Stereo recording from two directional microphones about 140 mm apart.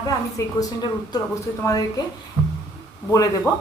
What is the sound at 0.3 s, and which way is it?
Speech, 25° left (ahead or behind).